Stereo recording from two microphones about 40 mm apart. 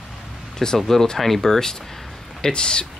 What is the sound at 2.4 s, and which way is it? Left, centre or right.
Speech, left.